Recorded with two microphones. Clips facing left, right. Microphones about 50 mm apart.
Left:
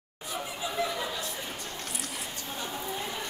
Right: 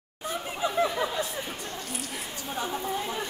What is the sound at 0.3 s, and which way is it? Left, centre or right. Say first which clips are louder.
Chatter: right 4 dB; right.